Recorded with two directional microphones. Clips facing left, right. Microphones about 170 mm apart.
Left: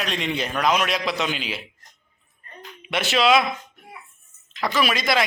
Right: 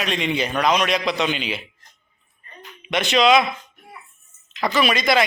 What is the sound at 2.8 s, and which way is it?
Speech, 5° left (ahead or behind).